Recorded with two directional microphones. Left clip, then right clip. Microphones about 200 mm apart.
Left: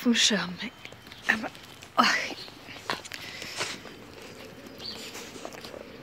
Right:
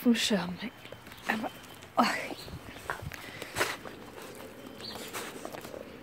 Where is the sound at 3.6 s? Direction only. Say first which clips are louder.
Right 3 dB; 40° right (ahead or behind).